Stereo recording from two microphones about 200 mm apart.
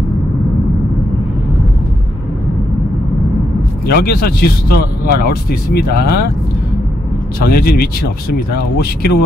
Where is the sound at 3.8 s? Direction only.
50° left (ahead or behind).